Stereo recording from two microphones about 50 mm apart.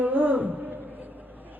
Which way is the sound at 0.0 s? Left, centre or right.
Right.